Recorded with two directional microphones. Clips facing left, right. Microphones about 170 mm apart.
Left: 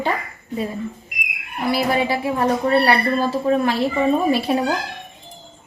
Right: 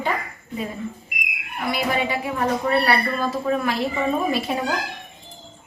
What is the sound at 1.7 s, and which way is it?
Speech, 30° left (ahead or behind).